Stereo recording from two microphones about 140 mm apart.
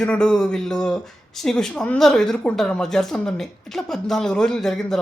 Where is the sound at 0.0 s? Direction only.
5° left (ahead or behind).